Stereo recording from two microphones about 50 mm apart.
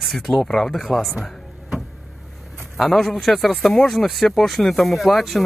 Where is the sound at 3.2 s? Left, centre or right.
Centre.